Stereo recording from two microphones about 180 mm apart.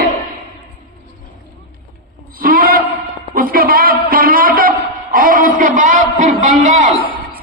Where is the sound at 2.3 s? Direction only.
55° right (ahead or behind).